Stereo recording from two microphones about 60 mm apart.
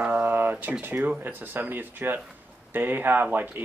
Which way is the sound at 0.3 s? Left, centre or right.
Right.